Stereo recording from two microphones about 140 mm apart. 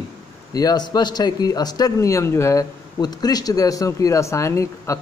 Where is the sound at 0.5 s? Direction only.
30° left (ahead or behind).